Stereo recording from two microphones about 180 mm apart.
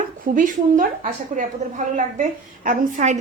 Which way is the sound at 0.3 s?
45° right (ahead or behind).